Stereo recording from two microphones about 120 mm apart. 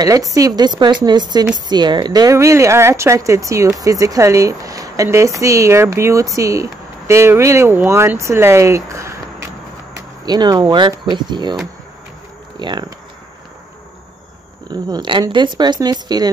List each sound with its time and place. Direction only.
0.0 s speech: 30° right (ahead or behind)
9.9 s speech: 35° right (ahead or behind)
12.5 s speech: 40° right (ahead or behind)
14.7 s speech: 35° right (ahead or behind)